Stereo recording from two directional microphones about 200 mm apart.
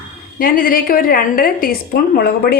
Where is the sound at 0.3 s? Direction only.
45° left (ahead or behind).